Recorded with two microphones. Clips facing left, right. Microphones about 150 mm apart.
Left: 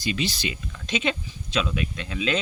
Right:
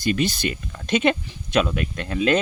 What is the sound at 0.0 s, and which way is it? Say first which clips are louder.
Speech: right 5 dB; 50° right (ahead or behind).